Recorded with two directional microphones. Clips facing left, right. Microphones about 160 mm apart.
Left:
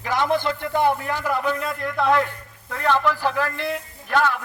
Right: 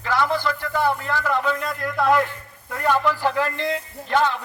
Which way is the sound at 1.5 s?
Centre (ahead or behind).